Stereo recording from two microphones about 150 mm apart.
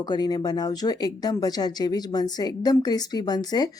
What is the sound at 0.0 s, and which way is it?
Speech, 25° left (ahead or behind).